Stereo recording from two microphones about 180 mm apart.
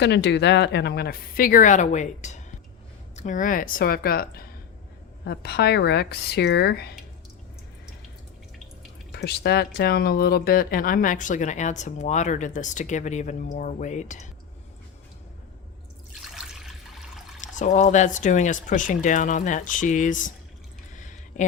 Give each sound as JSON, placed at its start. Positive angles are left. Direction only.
{"t": 0.0, "sound": "speech", "side_deg": 75}
{"t": 9.1, "sound": "speech", "side_deg": 65}
{"t": 16.3, "sound": "water", "side_deg": 0}
{"t": 17.4, "sound": "speech", "side_deg": 45}
{"t": 21.0, "sound": "a sound", "side_deg": 45}